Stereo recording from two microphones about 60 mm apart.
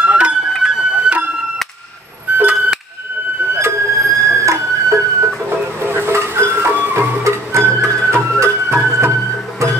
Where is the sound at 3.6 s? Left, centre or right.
Right.